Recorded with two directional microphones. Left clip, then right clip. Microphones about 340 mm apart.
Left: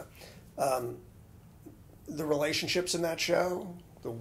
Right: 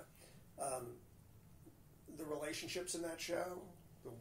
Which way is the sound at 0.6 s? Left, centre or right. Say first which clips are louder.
Left 15 dB; left.